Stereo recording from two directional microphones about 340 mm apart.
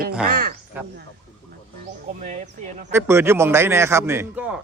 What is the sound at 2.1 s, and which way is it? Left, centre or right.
Speech, right.